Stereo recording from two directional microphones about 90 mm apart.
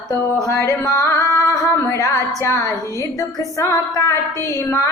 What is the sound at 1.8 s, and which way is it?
Music, 35° left (ahead or behind).